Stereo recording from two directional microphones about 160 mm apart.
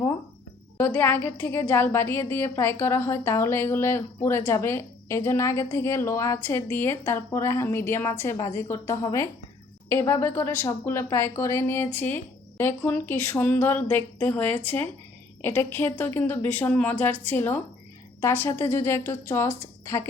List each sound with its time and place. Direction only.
0.8 s a woman's voice: 15° left (ahead or behind)